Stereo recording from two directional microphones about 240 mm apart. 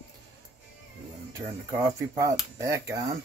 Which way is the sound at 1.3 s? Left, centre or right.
Centre.